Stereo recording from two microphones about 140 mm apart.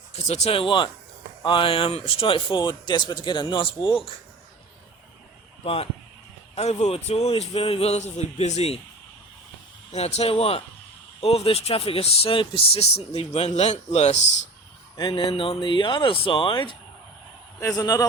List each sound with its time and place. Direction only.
0.1 s speech: 50° left (ahead or behind)
5.6 s speech: 45° left (ahead or behind)
9.9 s speech: 50° left (ahead or behind)
14.9 s speech: 35° left (ahead or behind)
17.6 s a man's voice: 20° left (ahead or behind)